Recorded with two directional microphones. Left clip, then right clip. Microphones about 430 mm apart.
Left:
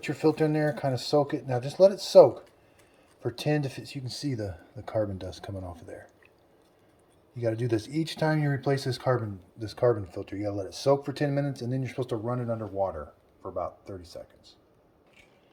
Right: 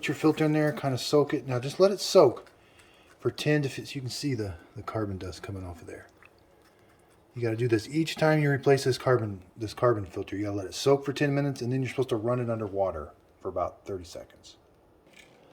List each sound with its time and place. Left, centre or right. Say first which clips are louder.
0.0 s speech: even; centre
7.3 s speech: right 1 dB; centre